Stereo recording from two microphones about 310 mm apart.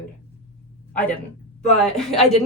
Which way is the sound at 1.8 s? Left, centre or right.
Centre.